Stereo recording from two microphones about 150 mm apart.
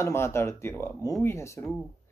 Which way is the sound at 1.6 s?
Centre (ahead or behind).